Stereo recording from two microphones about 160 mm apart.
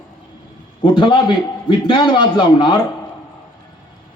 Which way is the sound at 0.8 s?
30° left (ahead or behind).